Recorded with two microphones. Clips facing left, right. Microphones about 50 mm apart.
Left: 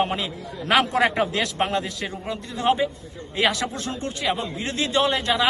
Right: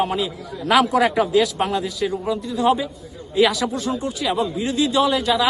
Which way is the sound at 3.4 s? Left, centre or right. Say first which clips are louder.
Right 4 dB; left.